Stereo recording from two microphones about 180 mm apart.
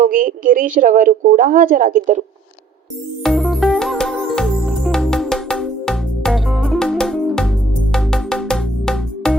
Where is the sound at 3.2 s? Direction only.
Centre (ahead or behind).